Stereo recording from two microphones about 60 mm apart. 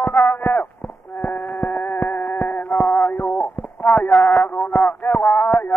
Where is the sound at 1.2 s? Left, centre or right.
Left.